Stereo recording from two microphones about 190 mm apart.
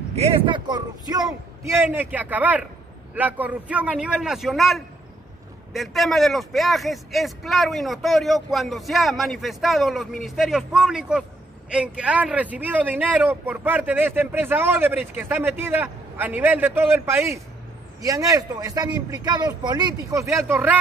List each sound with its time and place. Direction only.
0.1 s a man's voice: 30° right (ahead or behind); by 20.7 s 10° right (ahead or behind)